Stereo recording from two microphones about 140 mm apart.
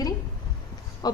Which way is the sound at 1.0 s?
30° left (ahead or behind).